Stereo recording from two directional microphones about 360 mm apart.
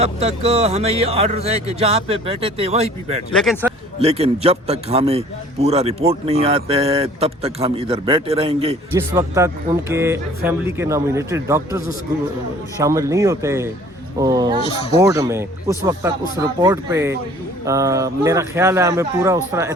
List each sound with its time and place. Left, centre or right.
0.0 s a man's voice: centre
3.3 s speech: centre
4.0 s a man's voice: centre